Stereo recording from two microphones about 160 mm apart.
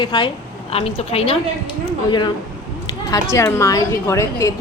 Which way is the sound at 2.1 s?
30° left (ahead or behind).